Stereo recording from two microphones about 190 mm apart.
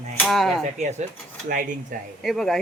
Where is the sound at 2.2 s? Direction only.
Centre (ahead or behind).